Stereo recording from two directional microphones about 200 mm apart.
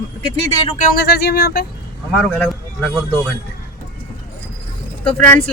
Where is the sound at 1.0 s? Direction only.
55° left (ahead or behind).